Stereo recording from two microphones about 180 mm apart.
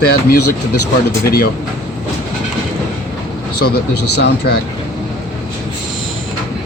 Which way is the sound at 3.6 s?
65° left (ahead or behind).